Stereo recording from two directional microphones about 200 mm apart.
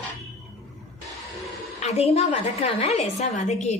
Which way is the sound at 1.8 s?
30° left (ahead or behind).